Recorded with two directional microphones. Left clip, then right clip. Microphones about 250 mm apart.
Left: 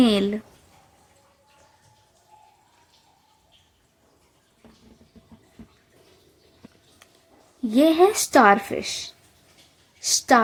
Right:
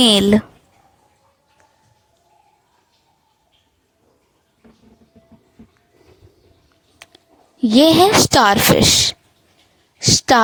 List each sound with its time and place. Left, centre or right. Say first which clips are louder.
0.0 s a woman's voice: right 8 dB; right
7.0 s a sound: right 12 dB; right
7.6 s a woman's voice: right 6 dB; right